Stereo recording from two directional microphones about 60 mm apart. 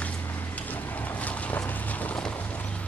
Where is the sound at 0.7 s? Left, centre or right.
Left.